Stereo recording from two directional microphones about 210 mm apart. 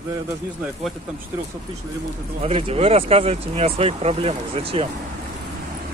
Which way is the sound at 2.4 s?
25° right (ahead or behind).